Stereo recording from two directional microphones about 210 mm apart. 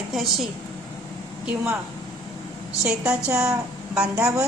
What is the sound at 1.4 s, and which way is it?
Speech, 5° right (ahead or behind).